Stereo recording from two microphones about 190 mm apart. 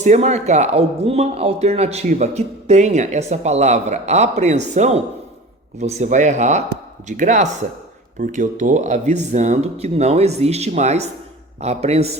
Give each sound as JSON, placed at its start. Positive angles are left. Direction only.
{"t": 0.0, "sound": "speech", "side_deg": -35}